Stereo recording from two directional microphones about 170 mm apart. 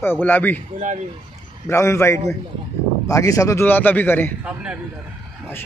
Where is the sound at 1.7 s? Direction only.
15° left (ahead or behind).